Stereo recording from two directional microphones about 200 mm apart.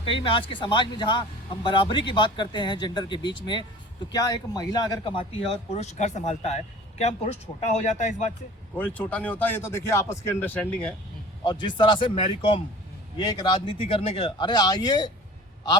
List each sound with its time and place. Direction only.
0.0 s speech: 25° left (ahead or behind)
7.6 s speech: 35° left (ahead or behind)
8.7 s speech: 5° left (ahead or behind)
11.6 s speech: 25° left (ahead or behind)